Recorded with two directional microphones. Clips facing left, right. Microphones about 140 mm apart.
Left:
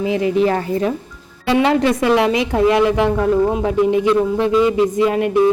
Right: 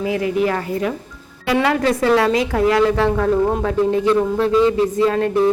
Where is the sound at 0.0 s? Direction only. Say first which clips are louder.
Left 3 dB; 25° left (ahead or behind).